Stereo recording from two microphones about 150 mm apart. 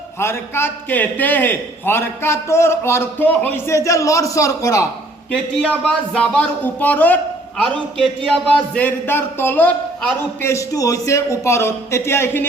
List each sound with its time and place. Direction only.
0.2 s a man's voice: 15° left (ahead or behind)
5.3 s a man's voice: 5° left (ahead or behind)